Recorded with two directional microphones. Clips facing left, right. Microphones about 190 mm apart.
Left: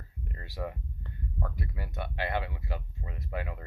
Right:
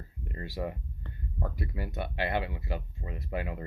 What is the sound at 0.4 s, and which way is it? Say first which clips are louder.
Speech: right 2 dB; 10° right (ahead or behind).